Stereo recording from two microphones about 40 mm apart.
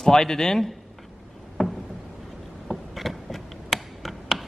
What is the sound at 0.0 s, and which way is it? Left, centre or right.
Speech, centre.